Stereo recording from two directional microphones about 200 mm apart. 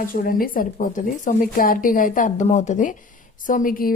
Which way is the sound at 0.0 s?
45° left (ahead or behind).